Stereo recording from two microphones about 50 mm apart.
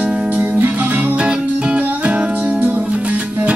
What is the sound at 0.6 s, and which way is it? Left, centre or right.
Music, right.